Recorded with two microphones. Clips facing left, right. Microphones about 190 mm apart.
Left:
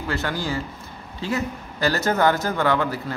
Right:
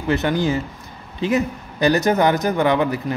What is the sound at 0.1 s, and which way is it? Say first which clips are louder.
Speech: right 8 dB; 20° right (ahead or behind).